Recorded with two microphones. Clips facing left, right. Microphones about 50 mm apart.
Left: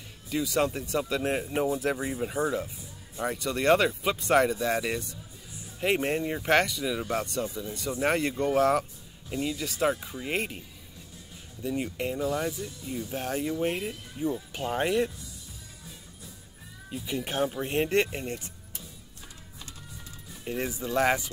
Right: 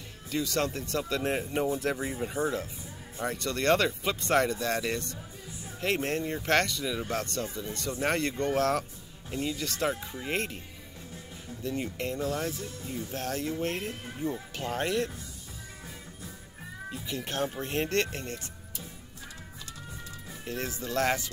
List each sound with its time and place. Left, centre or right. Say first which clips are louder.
0.3 s speech: left 3 dB; centre
11.6 s speech: left 2 dB; centre
12.5 s speech: left 2 dB; right
13.1 s speech: left 2 dB; centre
16.9 s speech: left 4 dB; centre
20.4 s speech: left 3 dB; centre